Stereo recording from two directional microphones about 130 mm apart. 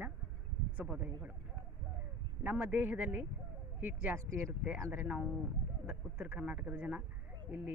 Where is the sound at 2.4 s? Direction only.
10° right (ahead or behind).